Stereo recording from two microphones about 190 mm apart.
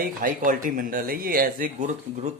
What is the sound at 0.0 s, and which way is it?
Speech, 45° right (ahead or behind).